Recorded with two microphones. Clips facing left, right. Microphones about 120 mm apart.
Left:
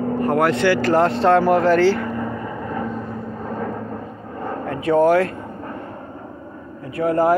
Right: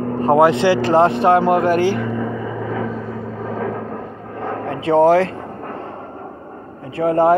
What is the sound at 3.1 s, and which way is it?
Vehicle, 90° right.